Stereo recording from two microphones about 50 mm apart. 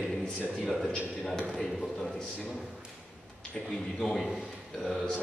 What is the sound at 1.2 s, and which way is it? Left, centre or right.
Speech, centre.